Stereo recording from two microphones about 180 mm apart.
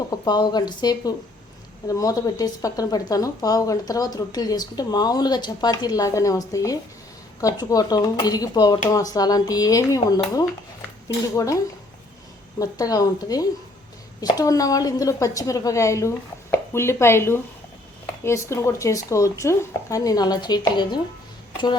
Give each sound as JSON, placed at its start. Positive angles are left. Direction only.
{"t": 0.1, "sound": "speech", "side_deg": 25}